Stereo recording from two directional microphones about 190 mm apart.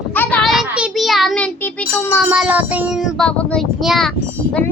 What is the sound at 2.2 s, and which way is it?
Speech, 5° right (ahead or behind).